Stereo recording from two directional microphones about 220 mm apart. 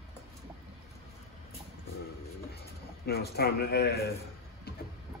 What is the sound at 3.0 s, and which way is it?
Speech, 45° left (ahead or behind).